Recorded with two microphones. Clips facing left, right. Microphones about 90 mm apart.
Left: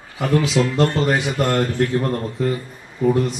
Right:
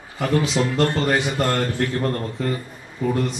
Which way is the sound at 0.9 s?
10° left (ahead or behind).